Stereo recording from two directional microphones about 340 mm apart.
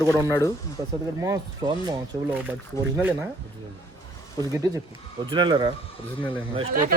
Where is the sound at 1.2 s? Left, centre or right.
Centre.